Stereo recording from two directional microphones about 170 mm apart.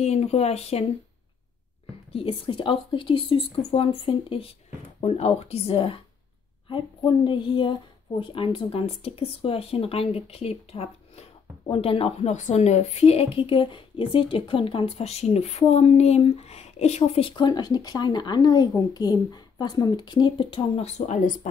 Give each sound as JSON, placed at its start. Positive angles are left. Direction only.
{"t": 0.0, "sound": "a woman's voice", "side_deg": 40}
{"t": 2.1, "sound": "a woman's voice", "side_deg": 30}